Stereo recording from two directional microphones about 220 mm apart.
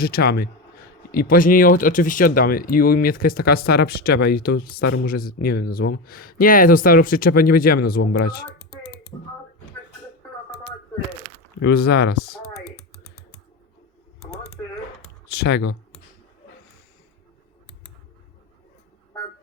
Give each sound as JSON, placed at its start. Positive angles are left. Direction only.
{"t": 0.0, "sound": "speech", "side_deg": 45}
{"t": 11.6, "sound": "speech", "side_deg": 45}
{"t": 15.3, "sound": "speech", "side_deg": 50}